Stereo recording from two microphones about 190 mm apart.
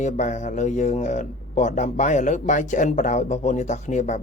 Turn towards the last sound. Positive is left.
turn(degrees=40)  # may be behind; listen again after turning